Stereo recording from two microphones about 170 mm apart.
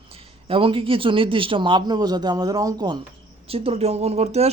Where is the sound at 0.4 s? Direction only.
30° right (ahead or behind).